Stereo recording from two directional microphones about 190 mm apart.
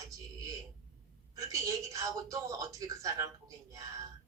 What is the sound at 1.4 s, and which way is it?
A woman's voice, 15° right (ahead or behind).